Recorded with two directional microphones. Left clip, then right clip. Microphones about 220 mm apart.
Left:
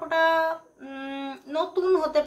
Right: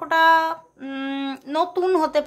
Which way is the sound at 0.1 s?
50° right (ahead or behind).